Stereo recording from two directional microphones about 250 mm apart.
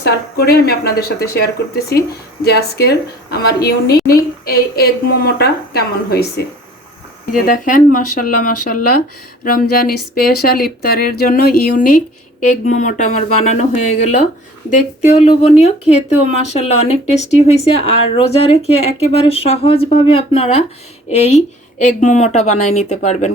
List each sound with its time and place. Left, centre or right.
0.0 s speech: left
14.7 s speech: left